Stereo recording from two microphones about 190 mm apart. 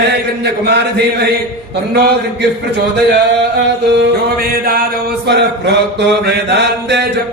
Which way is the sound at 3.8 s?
55° right (ahead or behind).